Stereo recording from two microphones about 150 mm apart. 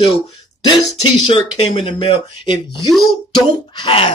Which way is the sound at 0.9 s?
45° left (ahead or behind).